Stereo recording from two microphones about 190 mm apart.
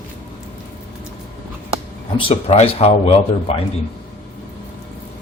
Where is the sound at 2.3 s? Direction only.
30° left (ahead or behind).